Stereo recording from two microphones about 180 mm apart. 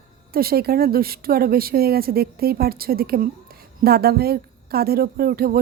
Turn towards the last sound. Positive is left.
turn(degrees=-55)  # may be behind; listen again after turning